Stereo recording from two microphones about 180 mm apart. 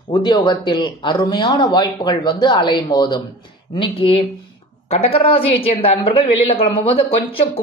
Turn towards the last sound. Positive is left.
turn(degrees=30)  # may be behind; listen again after turning